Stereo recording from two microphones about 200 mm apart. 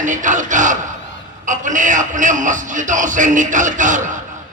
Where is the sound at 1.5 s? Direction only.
40° right (ahead or behind).